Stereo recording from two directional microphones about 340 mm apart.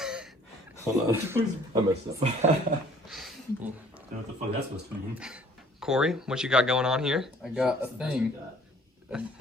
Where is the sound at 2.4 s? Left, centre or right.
Centre.